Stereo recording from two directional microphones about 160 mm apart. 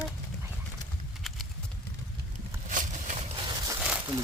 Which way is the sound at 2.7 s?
50° right (ahead or behind).